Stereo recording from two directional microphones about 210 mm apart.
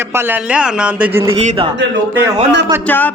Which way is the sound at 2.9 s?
10° left (ahead or behind).